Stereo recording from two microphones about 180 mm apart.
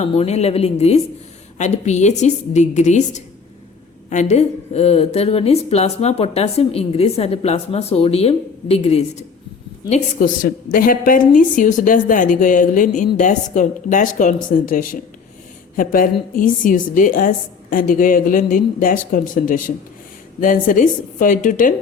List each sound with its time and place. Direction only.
0.0 s a woman's voice: 35° left (ahead or behind)
9.9 s a woman's voice: 50° left (ahead or behind)